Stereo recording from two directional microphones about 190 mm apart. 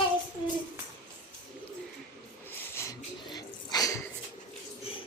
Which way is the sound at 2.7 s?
20° left (ahead or behind).